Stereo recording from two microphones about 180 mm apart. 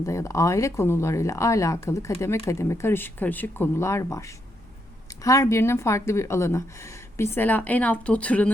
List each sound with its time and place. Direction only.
0.0 s speech: 15° left (ahead or behind)